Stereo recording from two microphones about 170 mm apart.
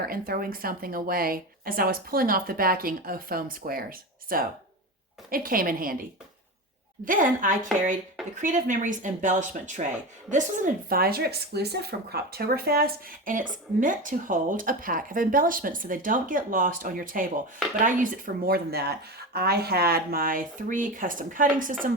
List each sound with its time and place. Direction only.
0.0 s a woman's voice: 60° right (ahead or behind)
7.0 s speech: 50° right (ahead or behind)